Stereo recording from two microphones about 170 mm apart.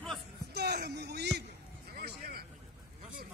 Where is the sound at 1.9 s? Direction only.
65° right (ahead or behind).